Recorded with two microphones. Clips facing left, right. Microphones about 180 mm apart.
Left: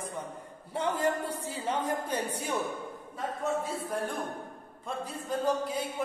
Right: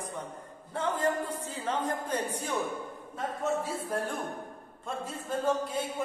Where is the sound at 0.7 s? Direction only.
10° left (ahead or behind).